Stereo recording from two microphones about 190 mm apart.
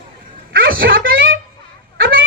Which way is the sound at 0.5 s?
50° right (ahead or behind).